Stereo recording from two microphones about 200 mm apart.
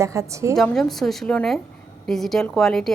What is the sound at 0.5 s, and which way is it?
A woman's voice, centre (ahead or behind).